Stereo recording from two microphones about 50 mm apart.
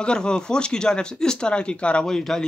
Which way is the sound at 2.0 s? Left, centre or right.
Centre.